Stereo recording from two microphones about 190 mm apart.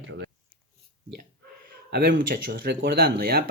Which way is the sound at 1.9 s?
55° right (ahead or behind).